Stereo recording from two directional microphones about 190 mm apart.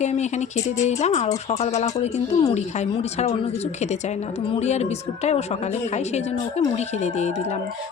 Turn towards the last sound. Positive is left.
turn(degrees=35)  # may be behind; listen again after turning